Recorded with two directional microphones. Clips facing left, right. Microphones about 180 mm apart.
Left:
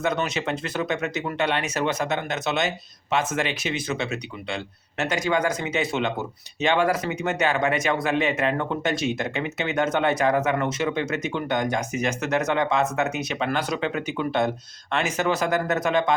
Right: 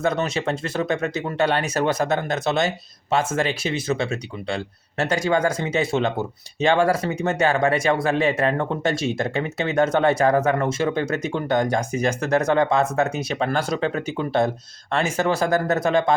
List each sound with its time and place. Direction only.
0.0 s speech: 30° right (ahead or behind)